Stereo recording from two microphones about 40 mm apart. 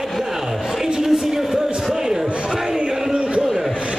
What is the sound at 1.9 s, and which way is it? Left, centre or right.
Speech, centre.